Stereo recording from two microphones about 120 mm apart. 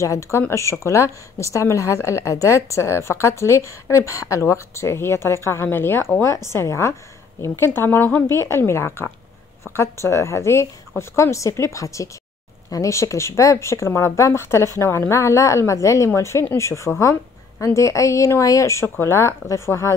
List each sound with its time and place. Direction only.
0.0 s a woman's voice: 25° left (ahead or behind)
10.0 s a woman's voice: 25° left (ahead or behind)